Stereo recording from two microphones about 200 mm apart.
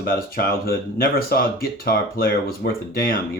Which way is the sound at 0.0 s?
45° left (ahead or behind).